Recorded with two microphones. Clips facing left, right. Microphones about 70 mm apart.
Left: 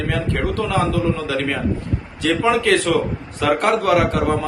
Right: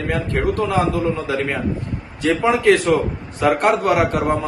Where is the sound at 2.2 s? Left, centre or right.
Centre.